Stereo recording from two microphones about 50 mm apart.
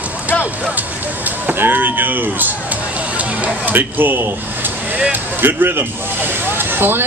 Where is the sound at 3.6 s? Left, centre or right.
Right.